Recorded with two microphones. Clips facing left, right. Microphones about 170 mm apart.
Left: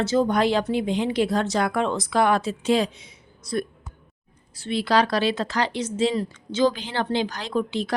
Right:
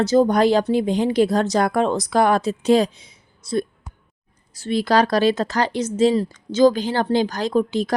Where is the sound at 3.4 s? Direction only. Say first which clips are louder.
Right 4 dB; 25° right (ahead or behind).